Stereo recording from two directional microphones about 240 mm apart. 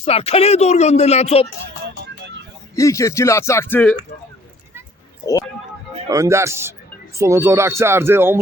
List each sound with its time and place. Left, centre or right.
0.0 s speech: left
2.7 s speech: centre
6.1 s speech: centre